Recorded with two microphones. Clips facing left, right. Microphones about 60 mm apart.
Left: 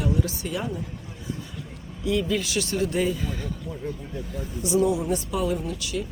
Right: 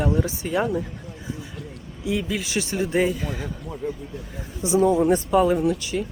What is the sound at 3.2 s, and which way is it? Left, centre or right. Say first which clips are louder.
Speech: right 2 dB; centre.